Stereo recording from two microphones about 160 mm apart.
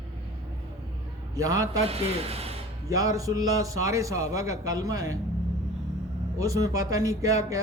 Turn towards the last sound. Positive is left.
turn(degrees=-20)  # may be behind; listen again after turning